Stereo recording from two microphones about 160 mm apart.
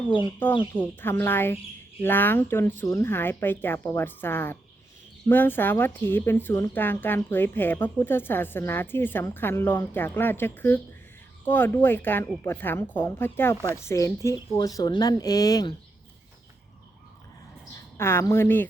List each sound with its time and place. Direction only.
0.7 s speech: 15° left (ahead or behind)
17.9 s speech: 15° left (ahead or behind)